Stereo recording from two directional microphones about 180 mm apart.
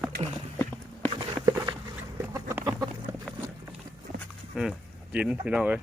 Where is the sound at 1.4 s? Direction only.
15° right (ahead or behind).